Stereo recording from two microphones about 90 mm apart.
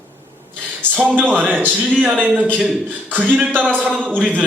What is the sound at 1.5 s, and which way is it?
Speech, 10° left (ahead or behind).